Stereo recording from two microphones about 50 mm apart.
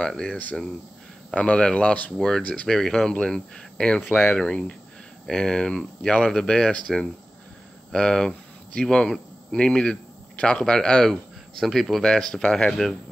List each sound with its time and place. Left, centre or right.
1.3 s speech: centre
2.4 s speech: left
2.7 s speech: centre
6.9 s speech: centre
7.9 s speech: centre
11.6 s speech: centre